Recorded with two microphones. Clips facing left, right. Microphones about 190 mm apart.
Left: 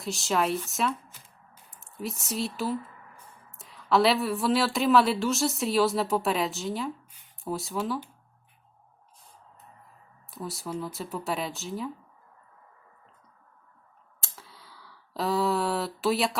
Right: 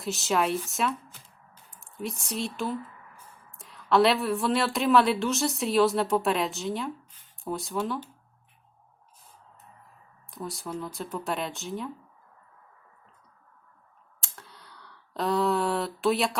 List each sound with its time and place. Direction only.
0.0 s speech: centre (ahead or behind)
2.0 s speech: centre (ahead or behind)
10.3 s speech: centre (ahead or behind)
14.2 s a sound: centre (ahead or behind)